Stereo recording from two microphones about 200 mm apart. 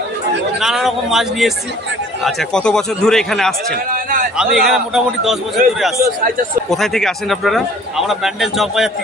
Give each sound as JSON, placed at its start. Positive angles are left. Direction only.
{"t": 0.6, "sound": "a man's voice", "side_deg": 0}
{"t": 3.7, "sound": "a sound", "side_deg": -45}
{"t": 4.4, "sound": "a man's voice", "side_deg": 0}
{"t": 6.7, "sound": "a man's voice", "side_deg": 0}